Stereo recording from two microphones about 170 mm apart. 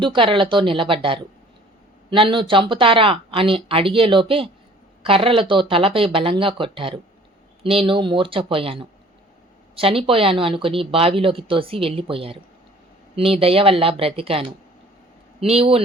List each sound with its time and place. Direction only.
0.0 s speech: 30° right (ahead or behind)